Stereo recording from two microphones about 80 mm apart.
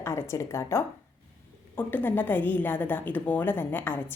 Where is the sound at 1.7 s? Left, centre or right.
Left.